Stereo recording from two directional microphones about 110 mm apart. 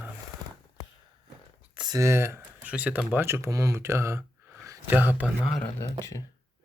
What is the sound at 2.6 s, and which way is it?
Speech, 15° right (ahead or behind).